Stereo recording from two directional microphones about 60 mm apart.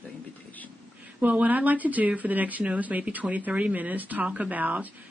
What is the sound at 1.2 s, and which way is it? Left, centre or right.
Speech, right.